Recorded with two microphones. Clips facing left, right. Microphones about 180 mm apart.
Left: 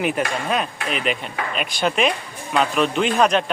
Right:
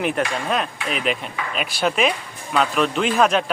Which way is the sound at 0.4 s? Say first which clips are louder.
Even; centre (ahead or behind).